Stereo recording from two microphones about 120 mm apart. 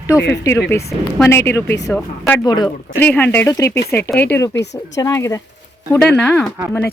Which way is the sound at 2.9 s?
15° left (ahead or behind).